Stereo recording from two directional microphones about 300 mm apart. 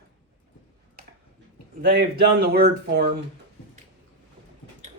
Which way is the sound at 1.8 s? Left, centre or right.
Right.